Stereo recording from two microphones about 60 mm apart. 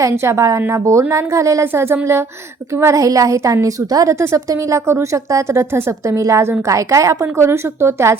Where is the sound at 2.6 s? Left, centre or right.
Right.